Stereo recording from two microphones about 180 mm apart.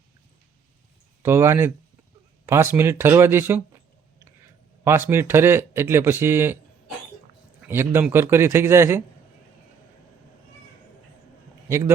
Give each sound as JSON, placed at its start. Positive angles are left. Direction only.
{"t": 1.2, "sound": "speech", "side_deg": -15}
{"t": 4.8, "sound": "speech", "side_deg": -15}
{"t": 7.6, "sound": "speech", "side_deg": -10}